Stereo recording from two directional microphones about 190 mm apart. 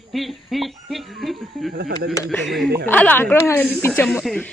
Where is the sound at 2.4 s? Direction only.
Centre (ahead or behind).